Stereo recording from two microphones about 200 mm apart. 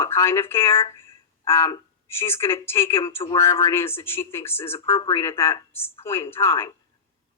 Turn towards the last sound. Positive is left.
turn(degrees=10)  # may be behind; listen again after turning